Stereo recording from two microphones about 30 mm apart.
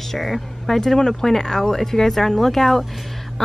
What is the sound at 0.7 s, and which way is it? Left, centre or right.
Speech, centre.